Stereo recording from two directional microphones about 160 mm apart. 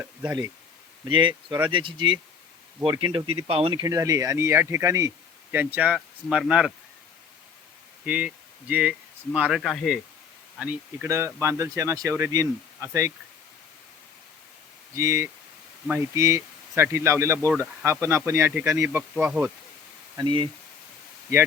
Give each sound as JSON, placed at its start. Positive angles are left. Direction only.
{"t": 0.0, "sound": "speech", "side_deg": -10}
{"t": 1.0, "sound": "speech", "side_deg": -30}
{"t": 3.8, "sound": "speech", "side_deg": -20}
{"t": 8.0, "sound": "speech", "side_deg": -10}
{"t": 14.9, "sound": "speech", "side_deg": -20}
{"t": 20.1, "sound": "speech", "side_deg": -30}